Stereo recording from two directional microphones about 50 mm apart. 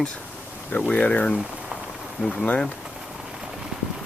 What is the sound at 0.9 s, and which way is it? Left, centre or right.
Speech, left.